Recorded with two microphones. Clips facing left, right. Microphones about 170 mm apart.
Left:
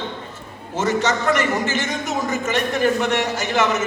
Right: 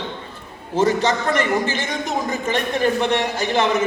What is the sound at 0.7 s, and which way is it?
A man's voice, 35° right (ahead or behind).